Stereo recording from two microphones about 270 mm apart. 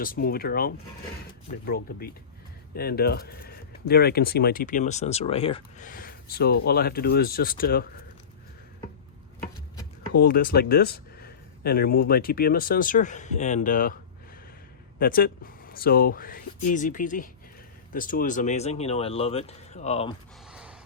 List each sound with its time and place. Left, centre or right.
0.0 s speech: left
10.1 s speech: left
14.9 s speech: left
20.5 s a sound: centre